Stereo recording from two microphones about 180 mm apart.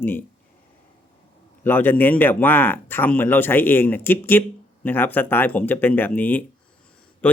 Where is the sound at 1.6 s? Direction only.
10° left (ahead or behind).